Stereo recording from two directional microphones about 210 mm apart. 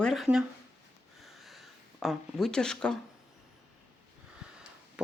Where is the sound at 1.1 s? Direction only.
Centre (ahead or behind).